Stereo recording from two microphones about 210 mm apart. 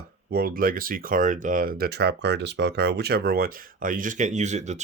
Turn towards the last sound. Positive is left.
turn(degrees=-35)  # may be behind; listen again after turning